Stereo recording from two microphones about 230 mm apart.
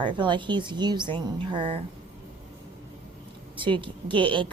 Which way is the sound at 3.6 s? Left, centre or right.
Right.